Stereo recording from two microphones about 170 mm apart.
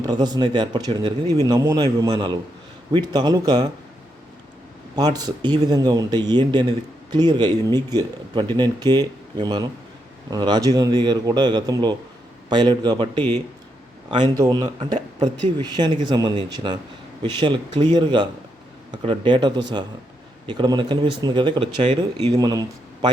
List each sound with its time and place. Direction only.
0.0 s speech: 25° right (ahead or behind)
4.9 s speech: 25° right (ahead or behind)
14.8 s speech: 45° right (ahead or behind)
15.6 s speech: 25° right (ahead or behind)
22.3 s a man's voice: 25° right (ahead or behind)